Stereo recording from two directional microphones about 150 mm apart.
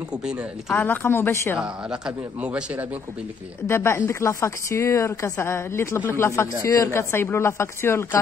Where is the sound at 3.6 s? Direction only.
15° left (ahead or behind).